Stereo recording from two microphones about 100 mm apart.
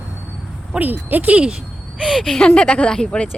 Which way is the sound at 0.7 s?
20° right (ahead or behind).